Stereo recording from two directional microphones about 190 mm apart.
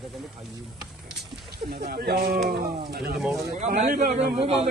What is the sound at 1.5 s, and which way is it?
Speech, 55° right (ahead or behind).